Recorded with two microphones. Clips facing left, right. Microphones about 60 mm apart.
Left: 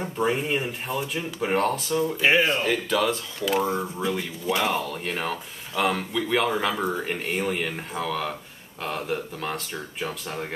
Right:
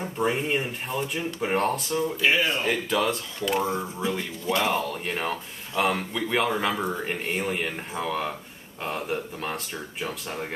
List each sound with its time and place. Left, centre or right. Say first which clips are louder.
0.0 s speech: left 1 dB; centre
2.1 s speech: left 3 dB; left
2.6 s speech: left 1 dB; centre